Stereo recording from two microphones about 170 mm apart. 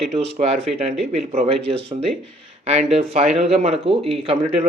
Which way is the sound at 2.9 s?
35° right (ahead or behind).